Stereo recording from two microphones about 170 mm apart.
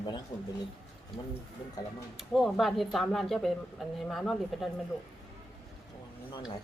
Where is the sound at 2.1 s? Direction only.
Centre (ahead or behind).